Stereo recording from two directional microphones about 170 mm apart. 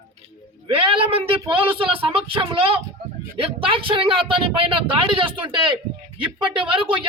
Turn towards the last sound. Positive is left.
turn(degrees=-30)  # may be behind; listen again after turning